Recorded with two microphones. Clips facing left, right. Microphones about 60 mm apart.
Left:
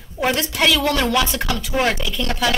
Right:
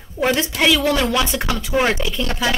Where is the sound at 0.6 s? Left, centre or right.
Centre.